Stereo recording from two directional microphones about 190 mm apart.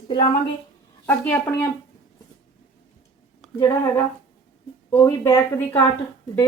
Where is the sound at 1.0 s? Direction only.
10° left (ahead or behind).